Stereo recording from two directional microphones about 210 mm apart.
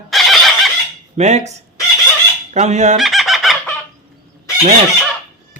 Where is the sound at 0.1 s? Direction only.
Centre (ahead or behind).